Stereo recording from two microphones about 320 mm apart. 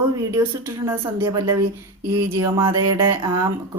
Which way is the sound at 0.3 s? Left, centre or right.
Centre.